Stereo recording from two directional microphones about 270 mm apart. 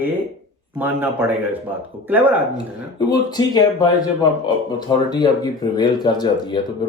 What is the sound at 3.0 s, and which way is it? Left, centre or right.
Speech, centre.